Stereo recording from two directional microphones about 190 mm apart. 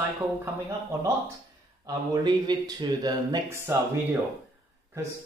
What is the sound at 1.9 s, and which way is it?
Speech, 20° right (ahead or behind).